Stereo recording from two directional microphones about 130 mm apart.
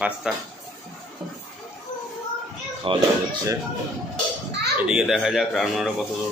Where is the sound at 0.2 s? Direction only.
5° right (ahead or behind).